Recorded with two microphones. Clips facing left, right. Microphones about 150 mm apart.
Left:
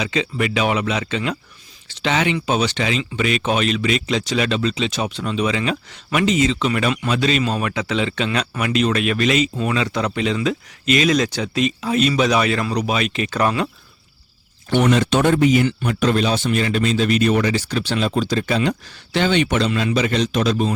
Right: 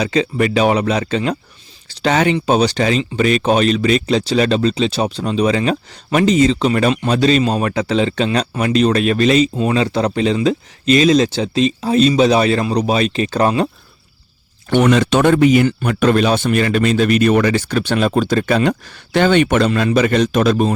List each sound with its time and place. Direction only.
0.0 s speech: 40° right (ahead or behind)
14.7 s speech: 85° right; by 20.7 s 50° right (ahead or behind)